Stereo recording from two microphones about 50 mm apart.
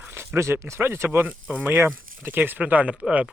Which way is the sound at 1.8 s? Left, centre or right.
Right.